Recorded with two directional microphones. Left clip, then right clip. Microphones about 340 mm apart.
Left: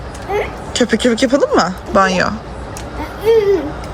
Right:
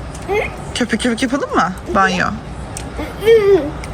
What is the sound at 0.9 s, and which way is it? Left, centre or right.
Speech, centre.